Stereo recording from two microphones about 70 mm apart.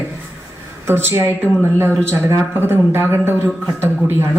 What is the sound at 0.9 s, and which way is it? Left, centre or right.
A man's voice, right.